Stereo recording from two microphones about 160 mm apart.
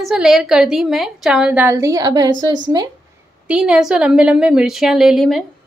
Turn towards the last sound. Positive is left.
turn(degrees=0)  # may be behind; listen again after turning